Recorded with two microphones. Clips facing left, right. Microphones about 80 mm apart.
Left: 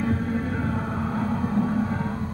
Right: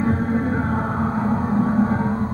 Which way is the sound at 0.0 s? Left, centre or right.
Right.